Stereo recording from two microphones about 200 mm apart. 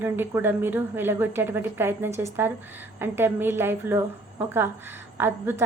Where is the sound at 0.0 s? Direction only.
10° right (ahead or behind).